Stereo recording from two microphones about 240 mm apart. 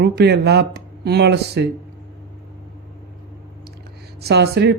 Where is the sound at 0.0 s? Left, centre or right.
Right.